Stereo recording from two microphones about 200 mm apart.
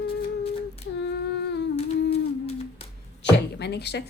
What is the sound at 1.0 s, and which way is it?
Humming, 60° left (ahead or behind).